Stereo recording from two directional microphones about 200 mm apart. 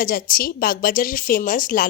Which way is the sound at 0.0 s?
45° left (ahead or behind).